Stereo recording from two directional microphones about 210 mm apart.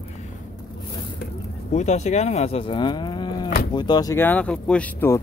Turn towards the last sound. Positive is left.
turn(degrees=10)  # may be behind; listen again after turning